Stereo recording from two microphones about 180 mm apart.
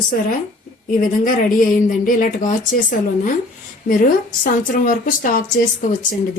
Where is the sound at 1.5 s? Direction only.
45° left (ahead or behind).